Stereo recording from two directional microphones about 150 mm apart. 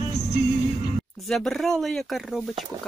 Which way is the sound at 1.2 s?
Centre (ahead or behind).